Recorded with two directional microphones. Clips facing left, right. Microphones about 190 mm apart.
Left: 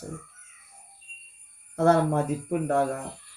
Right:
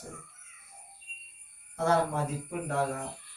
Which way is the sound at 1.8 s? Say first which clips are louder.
Left 6 dB; 55° left (ahead or behind).